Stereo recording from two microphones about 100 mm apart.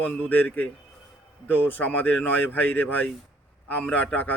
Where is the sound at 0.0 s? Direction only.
20° left (ahead or behind).